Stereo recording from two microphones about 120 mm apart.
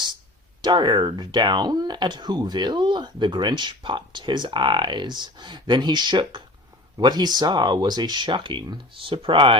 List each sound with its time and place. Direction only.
0.6 s speech: 40° right (ahead or behind)